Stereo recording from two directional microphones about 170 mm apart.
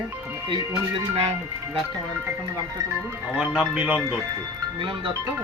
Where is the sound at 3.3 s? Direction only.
5° right (ahead or behind).